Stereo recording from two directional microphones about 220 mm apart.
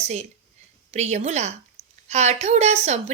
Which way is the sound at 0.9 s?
30° right (ahead or behind).